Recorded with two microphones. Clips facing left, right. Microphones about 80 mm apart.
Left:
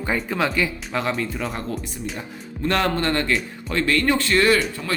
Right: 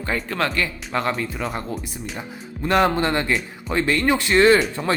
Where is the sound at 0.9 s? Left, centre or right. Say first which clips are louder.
Right 1 dB; centre.